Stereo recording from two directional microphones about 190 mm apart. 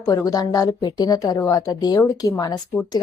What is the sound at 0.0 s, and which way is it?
Speech, 15° left (ahead or behind).